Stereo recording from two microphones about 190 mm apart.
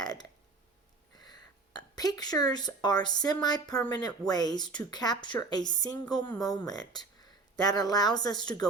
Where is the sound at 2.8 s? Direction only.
20° left (ahead or behind).